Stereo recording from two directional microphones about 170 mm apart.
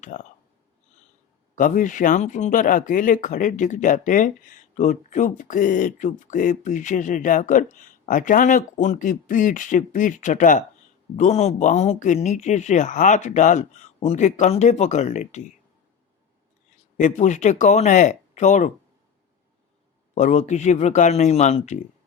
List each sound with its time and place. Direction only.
0.1 s speech: 45° left (ahead or behind)
1.5 s speech: 50° left (ahead or behind)
17.0 s speech: 45° left (ahead or behind)
20.1 s speech: 45° left (ahead or behind)